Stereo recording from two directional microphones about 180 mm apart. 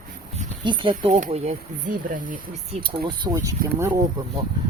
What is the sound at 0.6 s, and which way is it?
Speech, 25° right (ahead or behind).